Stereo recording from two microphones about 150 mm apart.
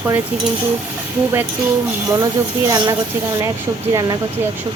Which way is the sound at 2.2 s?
25° right (ahead or behind).